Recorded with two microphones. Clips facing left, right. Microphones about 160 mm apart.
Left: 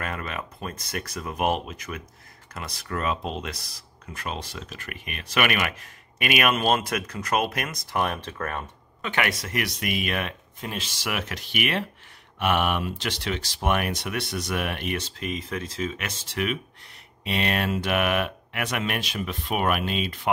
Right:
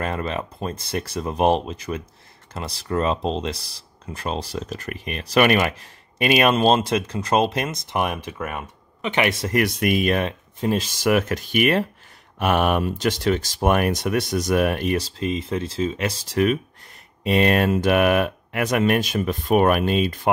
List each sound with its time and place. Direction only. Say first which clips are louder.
0.0 s speech: right 7 dB; 30° right (ahead or behind)
9.5 s speech: right 8 dB; 50° right (ahead or behind)